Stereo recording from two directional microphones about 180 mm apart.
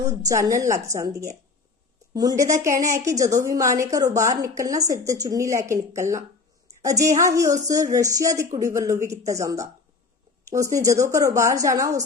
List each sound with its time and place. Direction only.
0.3 s a woman's voice: 20° right (ahead or behind)